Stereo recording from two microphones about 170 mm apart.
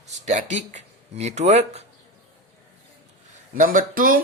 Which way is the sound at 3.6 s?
55° right (ahead or behind).